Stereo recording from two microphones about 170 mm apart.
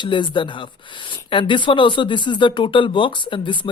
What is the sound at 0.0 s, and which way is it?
Speech, 30° left (ahead or behind).